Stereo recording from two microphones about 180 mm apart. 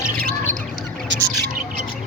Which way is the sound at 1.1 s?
90° right.